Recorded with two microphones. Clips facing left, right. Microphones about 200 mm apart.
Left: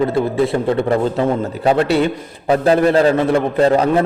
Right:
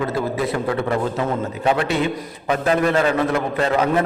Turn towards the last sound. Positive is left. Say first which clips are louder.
# left 5 dB
turn(degrees=35)  # may be behind; listen again after turning